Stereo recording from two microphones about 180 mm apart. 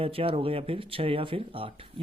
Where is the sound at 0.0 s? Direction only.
30° right (ahead or behind).